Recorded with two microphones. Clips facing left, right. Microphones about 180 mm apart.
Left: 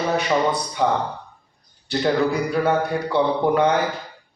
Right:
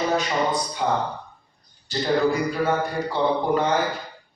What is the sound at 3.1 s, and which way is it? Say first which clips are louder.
Speech: left 2 dB; 65° left (ahead or behind).